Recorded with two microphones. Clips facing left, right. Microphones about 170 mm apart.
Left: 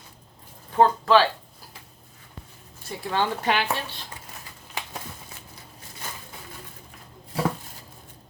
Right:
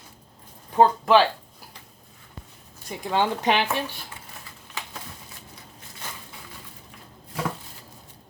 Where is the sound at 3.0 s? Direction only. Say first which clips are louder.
Right 2 dB; 15° right (ahead or behind).